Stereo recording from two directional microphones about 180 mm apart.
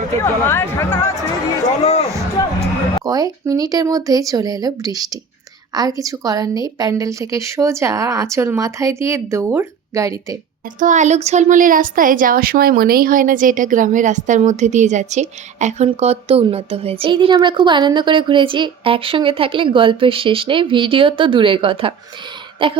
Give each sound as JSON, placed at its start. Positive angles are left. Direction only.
{"t": 0.2, "sound": "speech", "side_deg": 15}
{"t": 1.8, "sound": "speech", "side_deg": 35}
{"t": 2.6, "sound": "a woman's voice", "side_deg": -20}
{"t": 10.8, "sound": "speech", "side_deg": -45}